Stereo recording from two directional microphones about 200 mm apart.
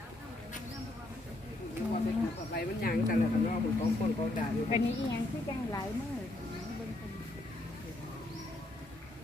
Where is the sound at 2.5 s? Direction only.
50° left (ahead or behind).